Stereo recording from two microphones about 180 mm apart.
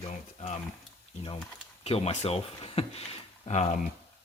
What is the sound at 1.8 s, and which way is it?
Speech, 35° left (ahead or behind).